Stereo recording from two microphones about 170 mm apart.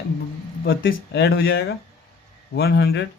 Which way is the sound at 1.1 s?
75° left (ahead or behind).